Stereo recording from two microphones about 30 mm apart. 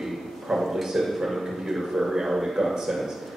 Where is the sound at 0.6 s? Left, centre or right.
Centre.